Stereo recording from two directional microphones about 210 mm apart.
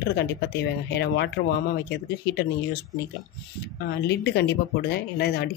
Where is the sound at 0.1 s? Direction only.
55° left (ahead or behind).